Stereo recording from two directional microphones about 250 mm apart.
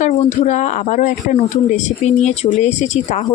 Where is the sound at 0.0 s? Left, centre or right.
Left.